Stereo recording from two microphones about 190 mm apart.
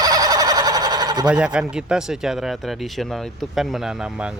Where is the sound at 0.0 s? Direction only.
20° right (ahead or behind).